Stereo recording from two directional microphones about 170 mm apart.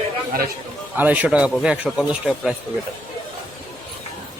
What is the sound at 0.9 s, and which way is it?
A man's voice, 10° right (ahead or behind).